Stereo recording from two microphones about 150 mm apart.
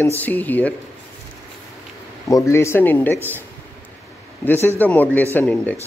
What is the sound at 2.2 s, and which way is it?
Speech, 20° left (ahead or behind).